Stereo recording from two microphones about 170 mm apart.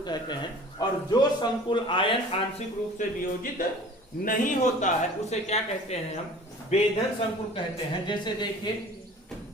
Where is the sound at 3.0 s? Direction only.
55° left (ahead or behind).